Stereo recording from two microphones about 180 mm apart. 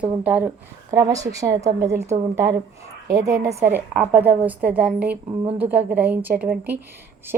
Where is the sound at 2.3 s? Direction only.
15° right (ahead or behind).